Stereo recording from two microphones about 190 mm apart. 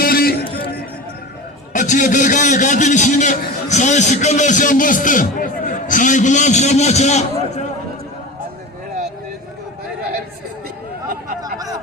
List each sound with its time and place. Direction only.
0.0 s music: 50° left (ahead or behind)
1.7 s a man's voice: 40° left (ahead or behind)